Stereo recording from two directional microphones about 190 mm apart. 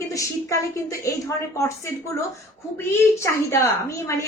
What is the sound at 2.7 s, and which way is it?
A woman's voice, 15° left (ahead or behind).